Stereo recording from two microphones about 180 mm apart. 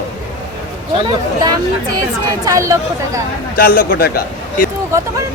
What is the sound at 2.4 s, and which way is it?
Speech, 15° right (ahead or behind).